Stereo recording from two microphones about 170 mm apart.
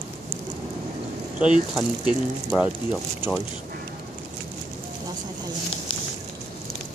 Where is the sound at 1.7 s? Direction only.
5° right (ahead or behind).